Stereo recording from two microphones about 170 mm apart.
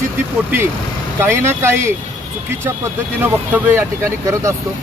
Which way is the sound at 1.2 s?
15° right (ahead or behind).